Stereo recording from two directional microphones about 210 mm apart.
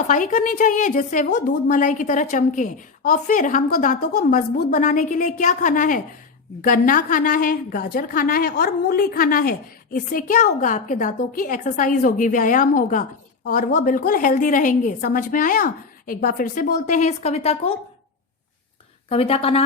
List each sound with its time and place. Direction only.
0.1 s a woman's voice: 40° left (ahead or behind)
19.0 s a woman's voice: 25° left (ahead or behind)